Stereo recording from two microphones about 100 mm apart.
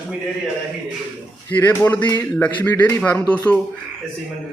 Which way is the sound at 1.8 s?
20° left (ahead or behind).